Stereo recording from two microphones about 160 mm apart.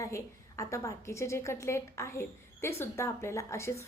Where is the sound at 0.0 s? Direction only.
20° left (ahead or behind).